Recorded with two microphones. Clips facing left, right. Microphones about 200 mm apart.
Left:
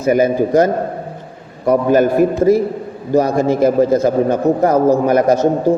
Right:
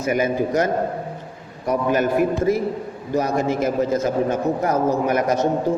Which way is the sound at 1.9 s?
35° left (ahead or behind).